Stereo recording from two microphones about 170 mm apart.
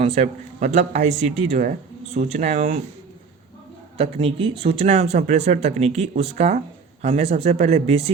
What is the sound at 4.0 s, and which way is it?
Speech, 35° right (ahead or behind).